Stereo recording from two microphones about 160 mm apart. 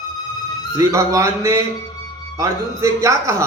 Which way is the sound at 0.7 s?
20° right (ahead or behind).